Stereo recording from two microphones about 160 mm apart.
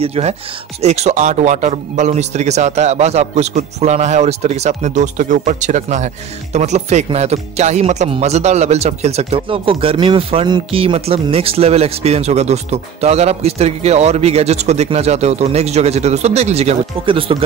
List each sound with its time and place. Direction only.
0.0 s a man's voice: 40° right (ahead or behind)